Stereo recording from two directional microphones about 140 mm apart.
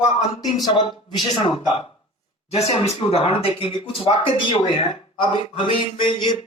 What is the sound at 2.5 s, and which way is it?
Speech, 45° left (ahead or behind).